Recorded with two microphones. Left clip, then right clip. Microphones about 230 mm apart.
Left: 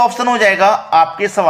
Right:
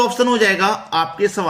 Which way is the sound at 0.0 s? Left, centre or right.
Centre.